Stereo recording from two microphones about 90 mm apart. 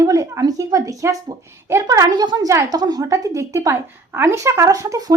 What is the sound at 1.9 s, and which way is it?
A woman's voice, 45° right (ahead or behind).